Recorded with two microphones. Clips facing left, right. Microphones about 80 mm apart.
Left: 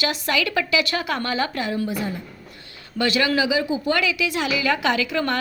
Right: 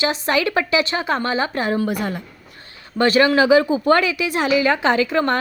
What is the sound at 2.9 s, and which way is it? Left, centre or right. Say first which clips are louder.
Speech: right 6 dB; right.